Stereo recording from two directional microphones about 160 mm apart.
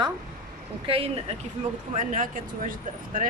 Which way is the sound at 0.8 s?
35° right (ahead or behind).